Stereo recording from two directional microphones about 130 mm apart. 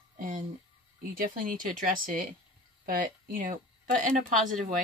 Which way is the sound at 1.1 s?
90° right.